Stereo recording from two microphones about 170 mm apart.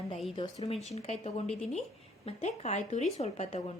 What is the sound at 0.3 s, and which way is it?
Speech, 35° left (ahead or behind).